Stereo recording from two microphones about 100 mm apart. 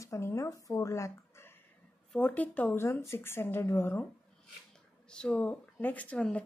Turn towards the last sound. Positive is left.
turn(degrees=10)  # may be behind; listen again after turning